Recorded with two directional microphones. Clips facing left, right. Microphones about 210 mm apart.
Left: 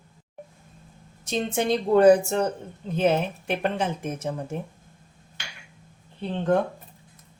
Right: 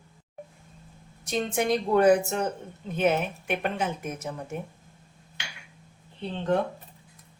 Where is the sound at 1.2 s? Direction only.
25° left (ahead or behind).